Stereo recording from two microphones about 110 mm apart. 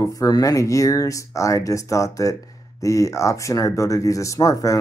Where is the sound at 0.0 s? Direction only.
30° left (ahead or behind).